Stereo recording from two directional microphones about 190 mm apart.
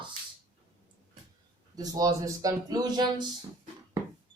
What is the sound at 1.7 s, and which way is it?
Speech, 20° right (ahead or behind).